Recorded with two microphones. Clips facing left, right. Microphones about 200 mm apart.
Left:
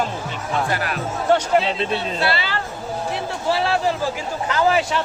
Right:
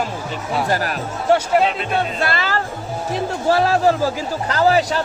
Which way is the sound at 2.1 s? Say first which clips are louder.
Right 1 dB; 45° right (ahead or behind).